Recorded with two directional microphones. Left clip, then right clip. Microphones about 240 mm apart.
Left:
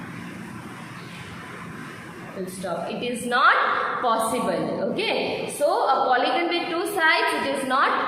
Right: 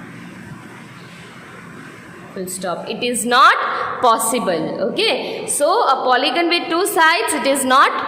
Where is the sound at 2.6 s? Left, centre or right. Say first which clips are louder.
Right 6 dB; right.